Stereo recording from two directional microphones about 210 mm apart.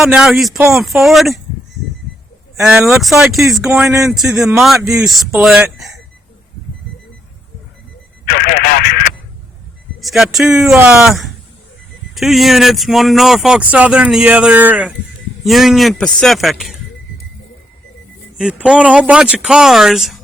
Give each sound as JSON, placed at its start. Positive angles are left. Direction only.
{"t": 0.0, "sound": "speech", "side_deg": 0}
{"t": 2.6, "sound": "speech", "side_deg": -5}
{"t": 8.2, "sound": "speech", "side_deg": 45}
{"t": 10.0, "sound": "speech", "side_deg": 0}
{"t": 18.3, "sound": "speech", "side_deg": -5}